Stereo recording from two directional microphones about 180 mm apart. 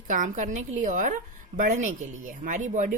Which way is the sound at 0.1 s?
45° right (ahead or behind).